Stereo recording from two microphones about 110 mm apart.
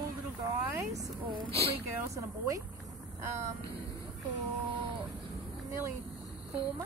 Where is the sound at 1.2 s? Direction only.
60° right (ahead or behind).